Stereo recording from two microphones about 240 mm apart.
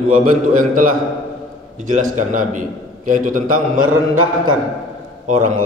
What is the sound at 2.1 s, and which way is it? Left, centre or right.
A man's voice, right.